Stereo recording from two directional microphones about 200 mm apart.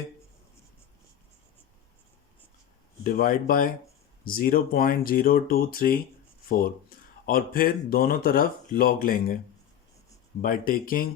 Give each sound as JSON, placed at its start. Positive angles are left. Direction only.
{"t": 3.0, "sound": "speech", "side_deg": 45}
{"t": 7.3, "sound": "speech", "side_deg": 45}
{"t": 10.4, "sound": "speech", "side_deg": 45}